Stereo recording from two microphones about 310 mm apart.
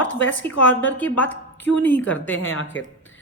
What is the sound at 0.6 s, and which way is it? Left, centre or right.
Speech, centre.